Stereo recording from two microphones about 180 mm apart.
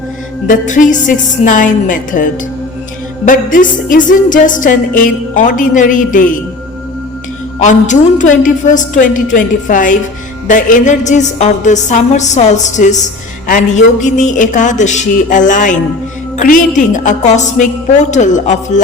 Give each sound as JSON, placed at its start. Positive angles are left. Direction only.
{"t": 0.4, "sound": "music", "side_deg": 45}
{"t": 7.6, "sound": "music", "side_deg": 45}